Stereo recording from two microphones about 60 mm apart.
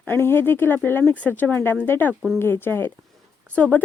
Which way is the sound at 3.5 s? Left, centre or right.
Left.